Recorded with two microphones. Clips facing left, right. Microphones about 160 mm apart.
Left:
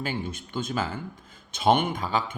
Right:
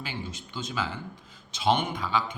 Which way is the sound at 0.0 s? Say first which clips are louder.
Left 6 dB; 50° left (ahead or behind).